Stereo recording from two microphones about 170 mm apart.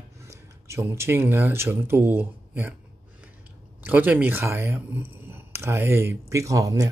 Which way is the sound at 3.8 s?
10° right (ahead or behind).